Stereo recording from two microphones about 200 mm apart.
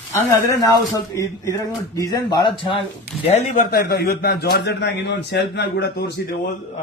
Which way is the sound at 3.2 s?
35° left (ahead or behind).